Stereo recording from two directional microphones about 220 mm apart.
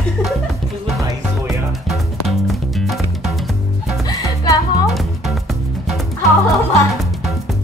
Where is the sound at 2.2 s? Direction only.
Centre (ahead or behind).